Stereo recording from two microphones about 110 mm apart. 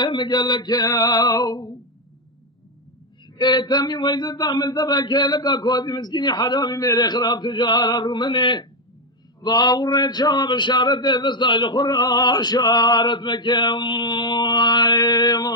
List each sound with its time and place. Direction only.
0.0 s speech: 45° left (ahead or behind)
3.3 s speech: 45° left (ahead or behind)